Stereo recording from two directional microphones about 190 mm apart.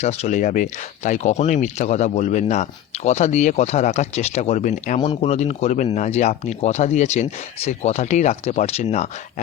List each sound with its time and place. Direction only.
0.0 s speech: 35° left (ahead or behind)